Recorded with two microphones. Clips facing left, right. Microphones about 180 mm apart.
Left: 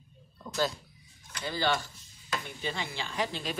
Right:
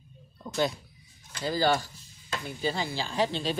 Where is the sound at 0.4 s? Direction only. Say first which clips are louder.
Right 3 dB; 15° right (ahead or behind).